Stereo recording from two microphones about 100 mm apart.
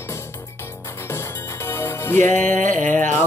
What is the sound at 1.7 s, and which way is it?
Music, 25° left (ahead or behind).